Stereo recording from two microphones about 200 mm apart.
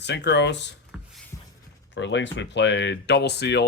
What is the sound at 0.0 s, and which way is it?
Speech, 60° left (ahead or behind).